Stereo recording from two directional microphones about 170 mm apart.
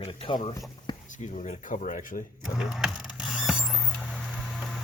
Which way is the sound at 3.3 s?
5° right (ahead or behind).